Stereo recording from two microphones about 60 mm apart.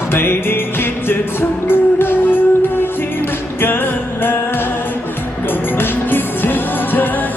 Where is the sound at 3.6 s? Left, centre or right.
Left.